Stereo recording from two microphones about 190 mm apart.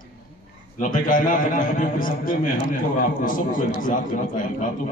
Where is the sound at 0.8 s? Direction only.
45° left (ahead or behind).